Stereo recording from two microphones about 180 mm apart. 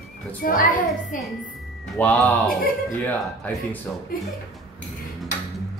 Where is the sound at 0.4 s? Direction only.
55° left (ahead or behind).